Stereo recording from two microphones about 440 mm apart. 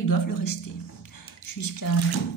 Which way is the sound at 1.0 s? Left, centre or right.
Left.